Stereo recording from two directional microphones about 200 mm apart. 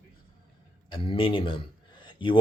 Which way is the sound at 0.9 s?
25° left (ahead or behind).